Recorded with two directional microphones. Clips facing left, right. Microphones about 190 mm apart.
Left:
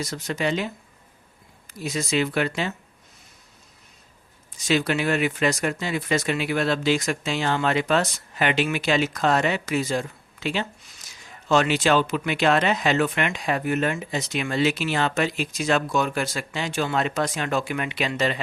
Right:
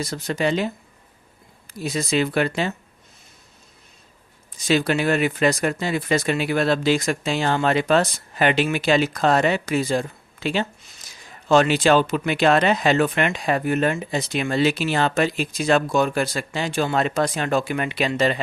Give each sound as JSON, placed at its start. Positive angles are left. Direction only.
{"t": 0.0, "sound": "speech", "side_deg": -30}
{"t": 4.5, "sound": "speech", "side_deg": -35}
{"t": 11.0, "sound": "a sound", "side_deg": -35}
{"t": 11.4, "sound": "speech", "side_deg": -35}